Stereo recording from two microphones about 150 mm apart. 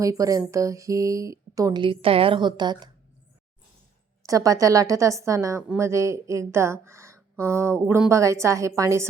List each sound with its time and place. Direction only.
0.0 s speech: 20° right (ahead or behind)
4.3 s speech: 20° right (ahead or behind)